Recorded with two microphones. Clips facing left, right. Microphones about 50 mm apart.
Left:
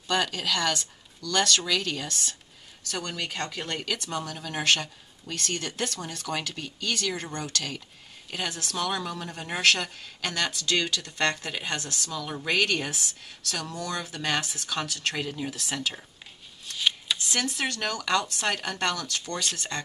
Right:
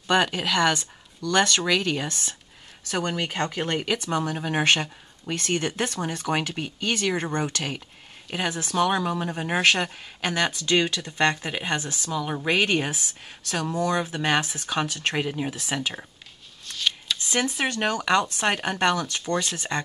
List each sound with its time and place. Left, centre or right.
0.1 s speech: right
16.7 s shuffling cards: centre
17.3 s speech: right